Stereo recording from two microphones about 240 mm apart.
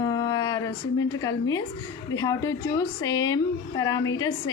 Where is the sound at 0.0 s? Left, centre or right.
Centre.